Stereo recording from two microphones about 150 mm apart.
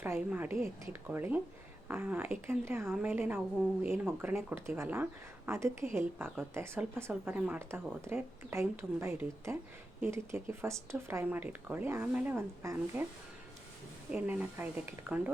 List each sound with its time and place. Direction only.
0.0 s a woman's voice: 10° right (ahead or behind)
14.1 s a woman's voice: 10° right (ahead or behind)